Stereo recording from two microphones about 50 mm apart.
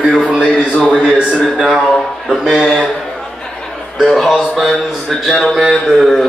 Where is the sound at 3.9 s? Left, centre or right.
Centre.